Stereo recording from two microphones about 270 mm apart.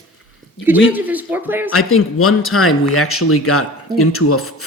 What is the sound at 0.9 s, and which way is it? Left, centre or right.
Speech, centre.